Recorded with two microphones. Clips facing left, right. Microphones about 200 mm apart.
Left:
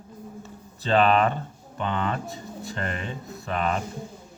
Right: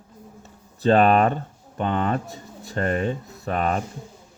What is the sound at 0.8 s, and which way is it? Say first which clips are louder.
Speech: right 4 dB; 45° right (ahead or behind).